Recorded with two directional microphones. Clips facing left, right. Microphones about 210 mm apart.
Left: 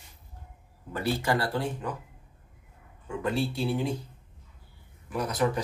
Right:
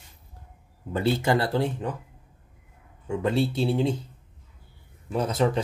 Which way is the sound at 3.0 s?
25° right (ahead or behind).